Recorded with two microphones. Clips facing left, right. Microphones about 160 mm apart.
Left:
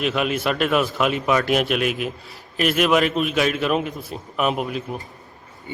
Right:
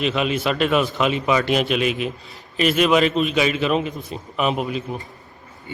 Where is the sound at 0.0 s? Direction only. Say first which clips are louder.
Right 1 dB; centre (ahead or behind).